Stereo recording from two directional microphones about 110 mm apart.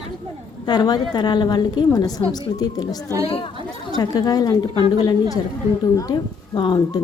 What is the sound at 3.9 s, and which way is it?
Speech, 35° left (ahead or behind).